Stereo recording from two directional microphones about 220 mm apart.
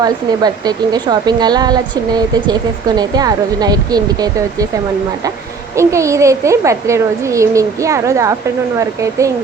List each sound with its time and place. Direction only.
0.0 s a woman's voice: 15° right (ahead or behind)
5.7 s a woman's voice: 15° right (ahead or behind)